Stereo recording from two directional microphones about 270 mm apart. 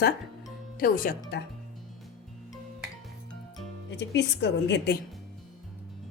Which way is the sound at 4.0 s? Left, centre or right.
Left.